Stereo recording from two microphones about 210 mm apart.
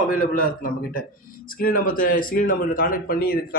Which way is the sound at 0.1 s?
40° left (ahead or behind).